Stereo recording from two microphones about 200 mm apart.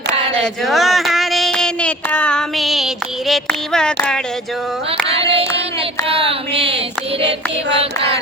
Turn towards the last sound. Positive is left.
turn(degrees=-60)  # may be behind; listen again after turning